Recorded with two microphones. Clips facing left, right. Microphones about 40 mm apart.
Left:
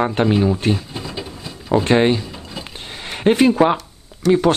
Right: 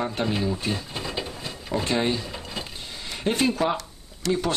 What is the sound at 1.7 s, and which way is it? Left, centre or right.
Speech, left.